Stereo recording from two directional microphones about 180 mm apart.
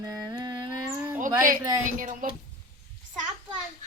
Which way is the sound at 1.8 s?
45° right (ahead or behind).